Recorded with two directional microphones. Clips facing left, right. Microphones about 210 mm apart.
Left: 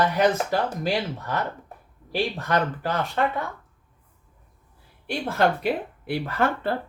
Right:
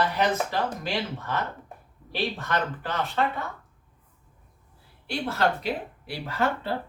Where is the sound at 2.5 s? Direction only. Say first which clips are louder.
Left 4 dB; 40° left (ahead or behind).